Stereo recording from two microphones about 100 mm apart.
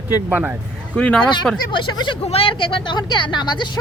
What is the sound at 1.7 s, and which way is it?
Speech, 55° left (ahead or behind).